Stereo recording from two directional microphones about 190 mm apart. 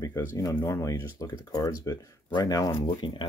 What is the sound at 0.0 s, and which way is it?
Speech, 15° left (ahead or behind).